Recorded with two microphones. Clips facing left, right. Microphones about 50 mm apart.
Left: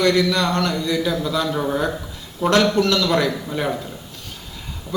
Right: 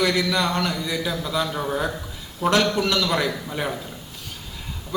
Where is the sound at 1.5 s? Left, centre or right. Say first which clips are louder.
Left 4 dB; centre.